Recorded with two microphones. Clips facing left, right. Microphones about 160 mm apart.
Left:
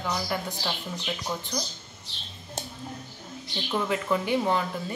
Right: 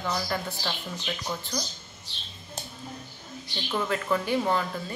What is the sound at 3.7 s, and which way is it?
Speech, 15° left (ahead or behind).